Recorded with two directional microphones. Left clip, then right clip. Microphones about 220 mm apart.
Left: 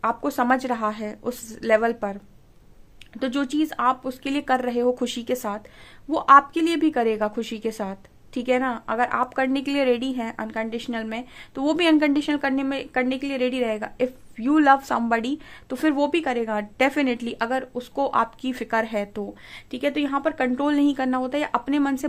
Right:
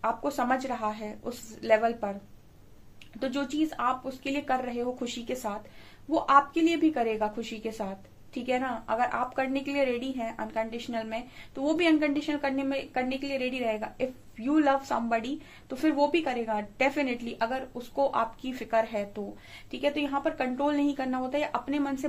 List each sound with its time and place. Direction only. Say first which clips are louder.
0.0 s a woman's voice: left 5 dB; 50° left (ahead or behind)
3.2 s a woman's voice: left 5 dB; 50° left (ahead or behind)